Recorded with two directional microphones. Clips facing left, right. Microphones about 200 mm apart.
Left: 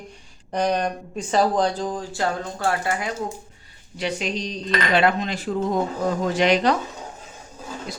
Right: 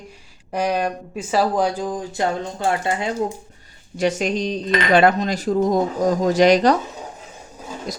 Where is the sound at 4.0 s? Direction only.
45° right (ahead or behind).